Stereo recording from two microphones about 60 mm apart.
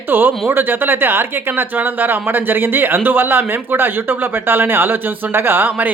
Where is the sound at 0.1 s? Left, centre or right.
Right.